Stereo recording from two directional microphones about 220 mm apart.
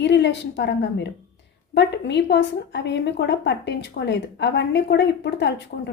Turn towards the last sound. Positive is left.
turn(degrees=50)  # may be behind; listen again after turning